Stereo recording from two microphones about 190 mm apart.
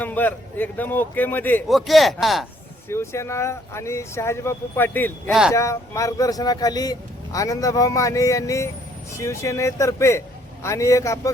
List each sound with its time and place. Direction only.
0.0 s a man's voice: 10° left (ahead or behind)
2.9 s a man's voice: 15° left (ahead or behind)
5.3 s speech: 5° right (ahead or behind)
5.5 s a man's voice: 15° left (ahead or behind)